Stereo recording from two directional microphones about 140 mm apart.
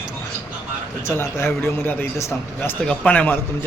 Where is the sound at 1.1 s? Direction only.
20° left (ahead or behind).